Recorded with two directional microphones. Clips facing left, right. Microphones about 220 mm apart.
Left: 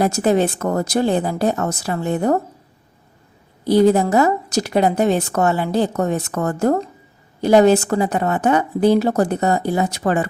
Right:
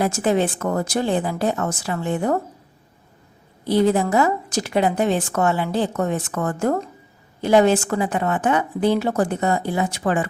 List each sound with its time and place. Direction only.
0.0 s a woman's voice: 40° left (ahead or behind)
3.6 s a woman's voice: 40° left (ahead or behind)